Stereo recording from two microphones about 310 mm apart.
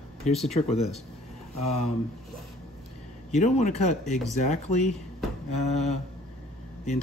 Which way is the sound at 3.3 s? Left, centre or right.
Left.